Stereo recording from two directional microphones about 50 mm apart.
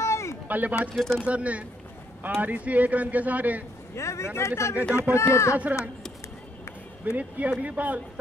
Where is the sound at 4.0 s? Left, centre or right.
Left.